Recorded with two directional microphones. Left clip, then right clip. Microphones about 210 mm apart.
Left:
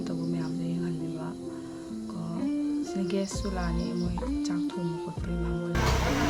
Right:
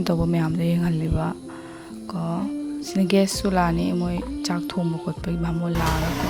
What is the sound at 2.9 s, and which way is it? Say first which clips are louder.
Speech: right 10 dB; 45° right (ahead or behind).